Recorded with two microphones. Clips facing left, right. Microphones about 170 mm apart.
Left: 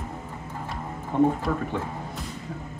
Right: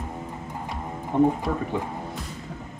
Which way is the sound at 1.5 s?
15° right (ahead or behind).